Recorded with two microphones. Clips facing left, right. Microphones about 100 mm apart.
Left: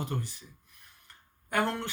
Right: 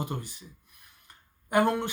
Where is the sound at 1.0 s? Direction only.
15° right (ahead or behind).